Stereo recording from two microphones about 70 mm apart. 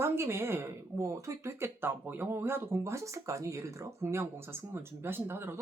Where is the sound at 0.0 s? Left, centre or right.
Right.